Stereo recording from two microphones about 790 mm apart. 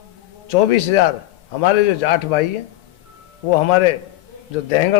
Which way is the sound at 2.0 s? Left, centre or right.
Left.